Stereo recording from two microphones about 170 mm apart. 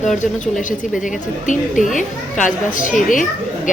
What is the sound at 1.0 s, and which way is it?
Speech, 50° left (ahead or behind).